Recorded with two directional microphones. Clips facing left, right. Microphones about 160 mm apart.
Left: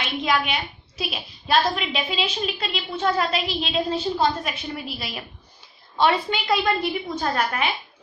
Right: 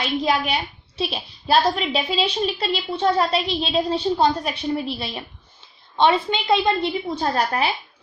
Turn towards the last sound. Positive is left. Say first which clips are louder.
# right 2 dB
turn(degrees=-35)  # may be behind; listen again after turning